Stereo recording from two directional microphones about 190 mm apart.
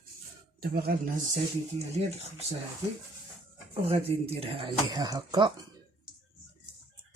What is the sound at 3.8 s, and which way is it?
Speech, 30° right (ahead or behind).